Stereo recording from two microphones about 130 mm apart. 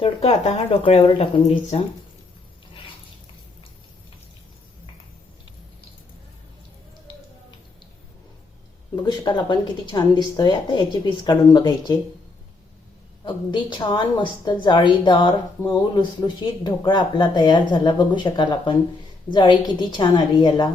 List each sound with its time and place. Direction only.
0.0 s speech: 50° left (ahead or behind)
9.0 s speech: 35° left (ahead or behind)
13.2 s speech: 35° left (ahead or behind)